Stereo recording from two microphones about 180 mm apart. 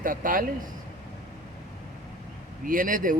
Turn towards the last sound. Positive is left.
turn(degrees=-50)  # may be behind; listen again after turning